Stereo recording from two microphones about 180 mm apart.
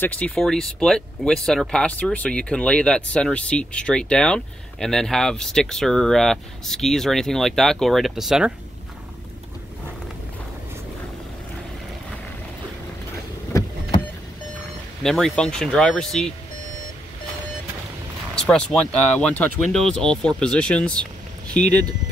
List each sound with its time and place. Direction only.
0.0 s speech: 10° left (ahead or behind)
13.5 s vehicle: 15° left (ahead or behind)
15.0 s speech: centre (ahead or behind)
18.3 s speech: 5° left (ahead or behind)